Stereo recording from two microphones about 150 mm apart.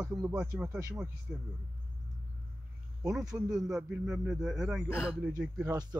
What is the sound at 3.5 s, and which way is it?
A man's voice, 5° right (ahead or behind).